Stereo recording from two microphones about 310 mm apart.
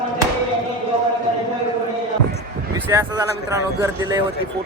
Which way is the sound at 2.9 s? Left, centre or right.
Centre.